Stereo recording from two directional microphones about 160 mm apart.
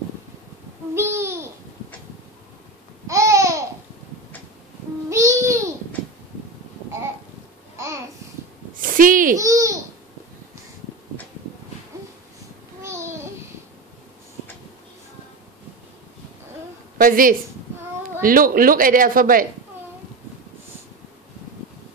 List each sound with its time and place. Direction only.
0.9 s babbling: 15° right (ahead or behind)
3.1 s babbling: 20° right (ahead or behind)
5.1 s babbling: 20° right (ahead or behind)
7.7 s babbling: 20° right (ahead or behind)
8.8 s a sound: 60° right (ahead or behind)
9.4 s babbling: 20° right (ahead or behind)
12.8 s babbling: 15° right (ahead or behind)
17.0 s speech: 60° right (ahead or behind)